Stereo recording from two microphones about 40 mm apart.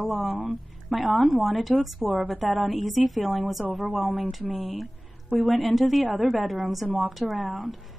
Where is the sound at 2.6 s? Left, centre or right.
Centre.